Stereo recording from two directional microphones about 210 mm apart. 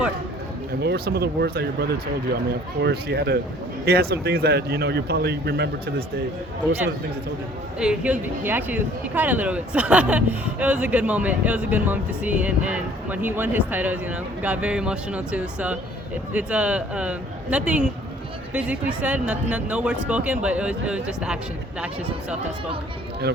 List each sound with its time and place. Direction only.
0.8 s speech: 50° right (ahead or behind)
7.8 s speech: 5° right (ahead or behind)